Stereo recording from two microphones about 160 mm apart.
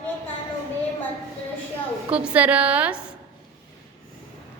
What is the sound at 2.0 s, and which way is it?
A woman's voice, 10° right (ahead or behind).